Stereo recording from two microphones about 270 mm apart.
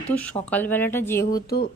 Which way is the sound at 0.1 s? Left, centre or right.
Centre.